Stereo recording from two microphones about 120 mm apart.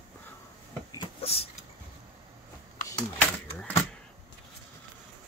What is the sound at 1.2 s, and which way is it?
Vehicle, 55° left (ahead or behind).